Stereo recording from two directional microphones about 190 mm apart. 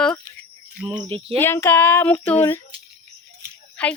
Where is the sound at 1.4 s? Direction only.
10° left (ahead or behind).